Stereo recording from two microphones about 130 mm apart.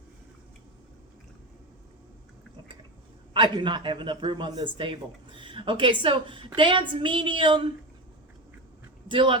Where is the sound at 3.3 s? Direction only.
40° right (ahead or behind).